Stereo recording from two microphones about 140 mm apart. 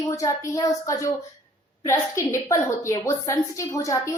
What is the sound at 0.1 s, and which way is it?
A woman's voice, 20° left (ahead or behind).